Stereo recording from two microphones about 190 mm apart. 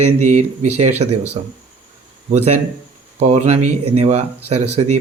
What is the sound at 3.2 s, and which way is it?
Speech, 35° right (ahead or behind).